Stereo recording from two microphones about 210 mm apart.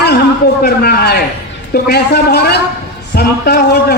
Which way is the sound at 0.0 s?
50° left (ahead or behind).